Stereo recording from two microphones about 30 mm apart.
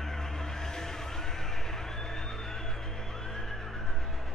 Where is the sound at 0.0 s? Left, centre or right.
Centre.